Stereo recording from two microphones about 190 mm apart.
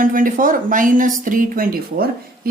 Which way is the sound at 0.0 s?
45° right (ahead or behind).